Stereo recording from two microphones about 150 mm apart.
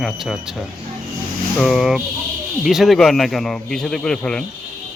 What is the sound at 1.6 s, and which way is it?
A man's voice, centre (ahead or behind).